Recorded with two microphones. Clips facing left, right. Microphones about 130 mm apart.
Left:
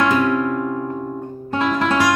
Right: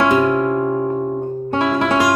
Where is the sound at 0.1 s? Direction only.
25° right (ahead or behind).